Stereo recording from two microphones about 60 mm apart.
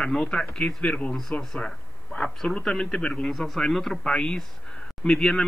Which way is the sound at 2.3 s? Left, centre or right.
Centre.